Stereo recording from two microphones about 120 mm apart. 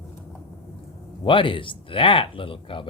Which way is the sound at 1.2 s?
45° left (ahead or behind).